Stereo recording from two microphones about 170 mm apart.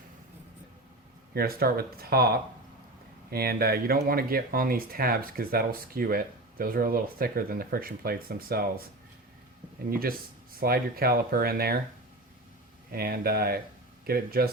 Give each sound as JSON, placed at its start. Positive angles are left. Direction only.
{"t": 1.3, "sound": "speech", "side_deg": -60}
{"t": 9.9, "sound": "speech", "side_deg": -60}
{"t": 12.9, "sound": "speech", "side_deg": -60}